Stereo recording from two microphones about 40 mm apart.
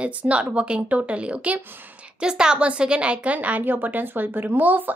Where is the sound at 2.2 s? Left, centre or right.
Right.